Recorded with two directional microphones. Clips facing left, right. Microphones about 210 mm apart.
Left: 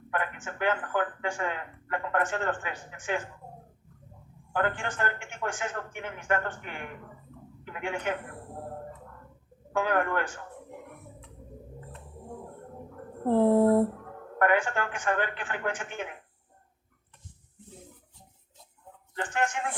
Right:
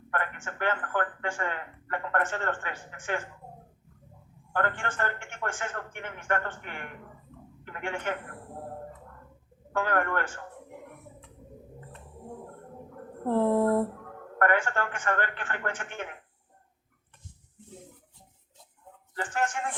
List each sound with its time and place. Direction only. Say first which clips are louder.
0.1 s speech: left 1 dB; 5° left (ahead or behind)
4.5 s a man's voice: left 1 dB; 5° left (ahead or behind)
9.7 s a man's voice: left 1 dB; centre (ahead or behind)
13.2 s a sound: left 3 dB; 20° left (ahead or behind)
14.3 s a man's voice: left 1 dB; centre (ahead or behind)
19.1 s a man's voice: even; 5° right (ahead or behind)